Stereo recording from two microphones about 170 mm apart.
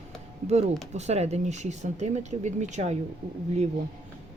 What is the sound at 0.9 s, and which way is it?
Speech, 40° right (ahead or behind).